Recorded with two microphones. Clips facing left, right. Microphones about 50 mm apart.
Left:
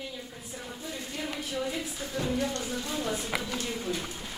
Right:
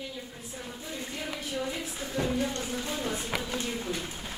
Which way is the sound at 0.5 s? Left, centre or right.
Centre.